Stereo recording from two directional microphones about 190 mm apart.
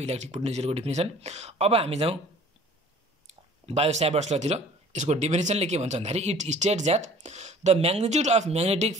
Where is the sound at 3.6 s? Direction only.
35° right (ahead or behind).